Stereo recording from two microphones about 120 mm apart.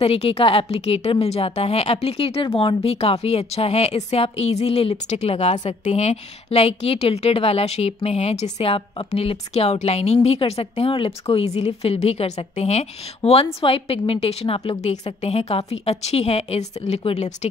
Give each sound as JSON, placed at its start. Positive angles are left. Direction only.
{"t": 0.0, "sound": "speech", "side_deg": 55}